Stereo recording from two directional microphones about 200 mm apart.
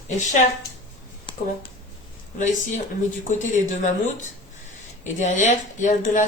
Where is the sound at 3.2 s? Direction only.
40° left (ahead or behind).